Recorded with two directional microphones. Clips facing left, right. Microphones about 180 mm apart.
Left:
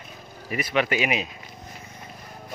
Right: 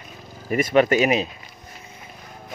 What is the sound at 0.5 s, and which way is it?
Speech, 45° right (ahead or behind).